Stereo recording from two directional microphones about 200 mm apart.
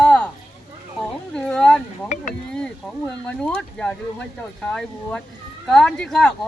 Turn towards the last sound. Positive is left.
turn(degrees=5)  # may be behind; listen again after turning